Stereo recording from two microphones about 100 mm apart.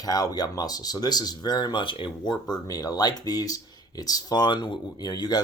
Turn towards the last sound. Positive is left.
turn(degrees=40)  # may be behind; listen again after turning